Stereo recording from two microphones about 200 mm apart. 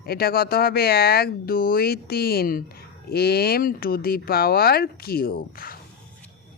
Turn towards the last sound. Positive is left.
turn(degrees=45)  # may be behind; listen again after turning